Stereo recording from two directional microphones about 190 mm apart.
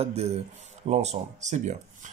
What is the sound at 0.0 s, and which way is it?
Speech, 30° right (ahead or behind).